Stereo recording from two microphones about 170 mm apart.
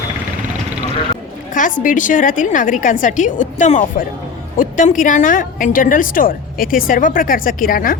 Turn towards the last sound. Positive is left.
turn(degrees=55)  # may be behind; listen again after turning